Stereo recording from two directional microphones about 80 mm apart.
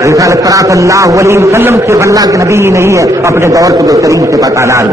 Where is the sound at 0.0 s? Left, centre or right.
Right.